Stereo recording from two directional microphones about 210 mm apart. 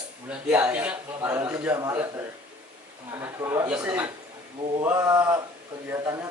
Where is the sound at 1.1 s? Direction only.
15° right (ahead or behind).